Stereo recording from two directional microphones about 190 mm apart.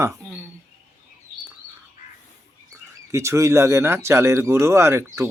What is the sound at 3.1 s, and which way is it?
Speech, 15° right (ahead or behind).